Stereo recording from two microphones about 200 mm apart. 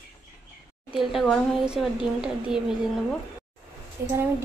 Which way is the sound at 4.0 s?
10° right (ahead or behind).